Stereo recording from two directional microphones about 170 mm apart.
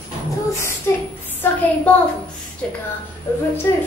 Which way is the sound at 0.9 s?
15° left (ahead or behind).